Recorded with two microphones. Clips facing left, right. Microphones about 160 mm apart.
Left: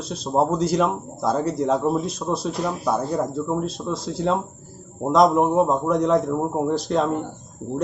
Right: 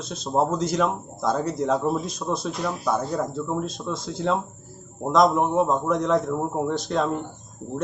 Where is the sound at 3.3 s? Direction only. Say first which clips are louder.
Left 3 dB; 5° left (ahead or behind).